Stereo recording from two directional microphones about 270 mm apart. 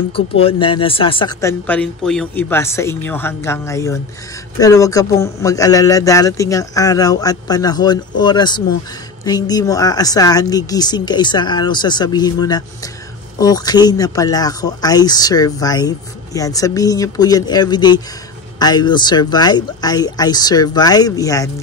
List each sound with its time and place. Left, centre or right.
0.1 s speech: left